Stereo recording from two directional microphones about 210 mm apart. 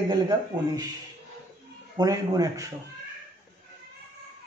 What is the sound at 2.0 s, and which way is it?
Speech, 15° right (ahead or behind).